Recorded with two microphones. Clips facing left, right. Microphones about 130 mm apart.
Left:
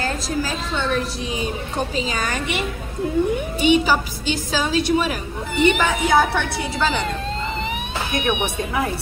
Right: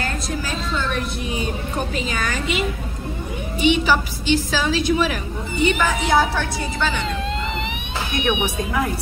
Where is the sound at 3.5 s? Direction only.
40° left (ahead or behind).